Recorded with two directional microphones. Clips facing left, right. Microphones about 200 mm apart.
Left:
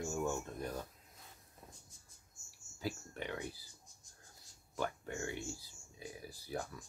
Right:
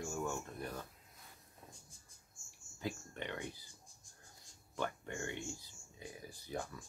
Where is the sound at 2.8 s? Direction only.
5° left (ahead or behind).